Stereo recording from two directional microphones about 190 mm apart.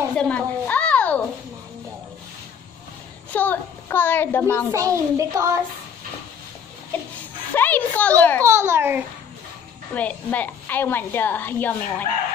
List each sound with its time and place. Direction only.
0.1 s a sound: 5° left (ahead or behind)
3.3 s a child's voice: 10° left (ahead or behind)
4.6 s a child's voice: 15° right (ahead or behind)
7.5 s a woman's voice: 10° left (ahead or behind)
8.5 s a child's voice: 15° right (ahead or behind)
9.9 s a woman's voice: 10° left (ahead or behind)